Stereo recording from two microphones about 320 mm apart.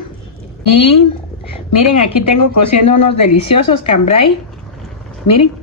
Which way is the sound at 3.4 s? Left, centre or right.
Centre.